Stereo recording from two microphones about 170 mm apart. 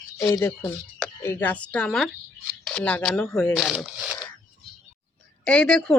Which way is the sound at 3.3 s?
15° left (ahead or behind).